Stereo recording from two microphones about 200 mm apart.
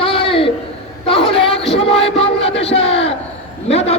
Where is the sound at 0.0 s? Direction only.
25° left (ahead or behind).